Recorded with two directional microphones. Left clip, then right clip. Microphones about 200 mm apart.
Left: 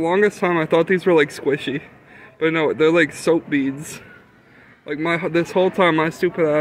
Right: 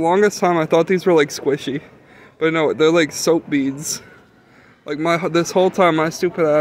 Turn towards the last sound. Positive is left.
turn(degrees=-10)  # may be behind; listen again after turning